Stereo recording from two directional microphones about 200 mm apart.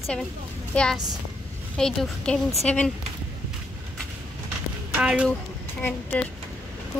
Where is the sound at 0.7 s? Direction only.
5° left (ahead or behind).